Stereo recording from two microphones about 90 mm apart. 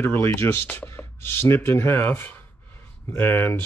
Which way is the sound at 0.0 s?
25° left (ahead or behind).